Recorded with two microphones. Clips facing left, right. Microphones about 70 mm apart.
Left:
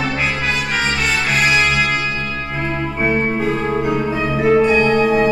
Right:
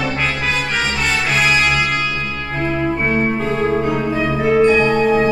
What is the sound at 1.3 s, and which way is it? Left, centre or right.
Brass instrument, centre.